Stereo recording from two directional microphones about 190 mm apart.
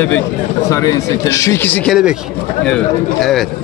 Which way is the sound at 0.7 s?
15° left (ahead or behind).